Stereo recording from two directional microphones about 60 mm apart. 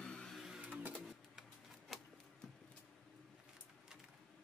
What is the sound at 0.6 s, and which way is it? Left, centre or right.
Printer, right.